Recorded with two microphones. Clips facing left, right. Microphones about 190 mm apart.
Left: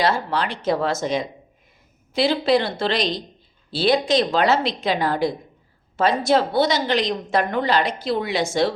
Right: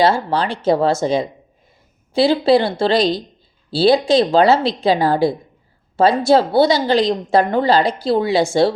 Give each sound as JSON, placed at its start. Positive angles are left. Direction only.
{"t": 0.0, "sound": "a woman's voice", "side_deg": -30}